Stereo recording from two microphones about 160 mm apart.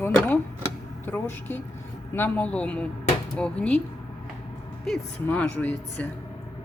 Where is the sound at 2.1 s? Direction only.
10° left (ahead or behind).